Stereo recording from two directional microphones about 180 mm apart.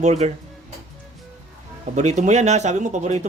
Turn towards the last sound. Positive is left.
turn(degrees=-40)  # may be behind; listen again after turning